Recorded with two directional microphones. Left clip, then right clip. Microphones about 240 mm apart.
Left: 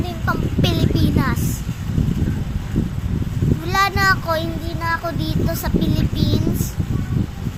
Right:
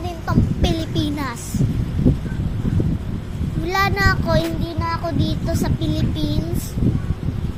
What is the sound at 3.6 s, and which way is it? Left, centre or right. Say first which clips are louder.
Child singing: left 2 dB; centre.